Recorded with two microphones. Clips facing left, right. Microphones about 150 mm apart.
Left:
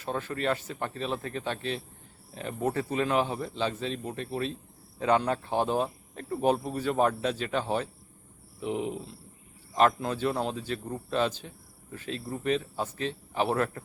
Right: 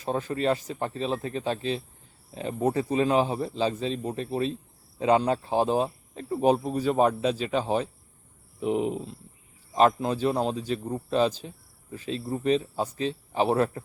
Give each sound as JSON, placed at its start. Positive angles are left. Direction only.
{"t": 0.0, "sound": "speech", "side_deg": -35}
{"t": 6.2, "sound": "speech", "side_deg": -10}
{"t": 8.6, "sound": "a man's voice", "side_deg": -35}
{"t": 10.7, "sound": "speech", "side_deg": -15}
{"t": 11.1, "sound": "speech", "side_deg": -35}